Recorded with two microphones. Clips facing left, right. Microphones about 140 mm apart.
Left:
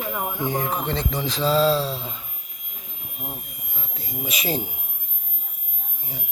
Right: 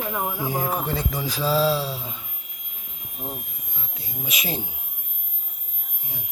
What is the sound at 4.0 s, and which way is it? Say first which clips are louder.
Speech: left 3 dB; centre (ahead or behind).